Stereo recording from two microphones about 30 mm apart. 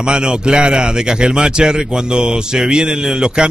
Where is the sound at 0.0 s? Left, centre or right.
Right.